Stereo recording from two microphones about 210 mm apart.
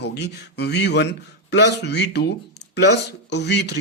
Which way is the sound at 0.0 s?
55° left (ahead or behind).